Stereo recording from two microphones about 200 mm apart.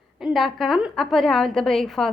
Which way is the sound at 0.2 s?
Centre (ahead or behind).